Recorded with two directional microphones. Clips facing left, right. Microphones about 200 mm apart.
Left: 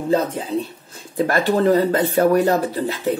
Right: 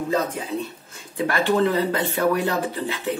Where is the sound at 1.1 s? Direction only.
40° left (ahead or behind).